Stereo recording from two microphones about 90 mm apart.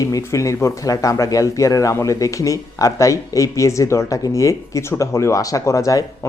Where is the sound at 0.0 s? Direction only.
35° left (ahead or behind).